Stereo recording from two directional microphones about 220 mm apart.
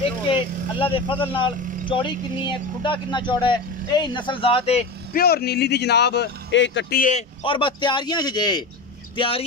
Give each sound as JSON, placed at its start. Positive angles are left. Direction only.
{"t": 0.3, "sound": "speech", "side_deg": 25}
{"t": 5.1, "sound": "speech", "side_deg": 45}
{"t": 7.4, "sound": "speech", "side_deg": 20}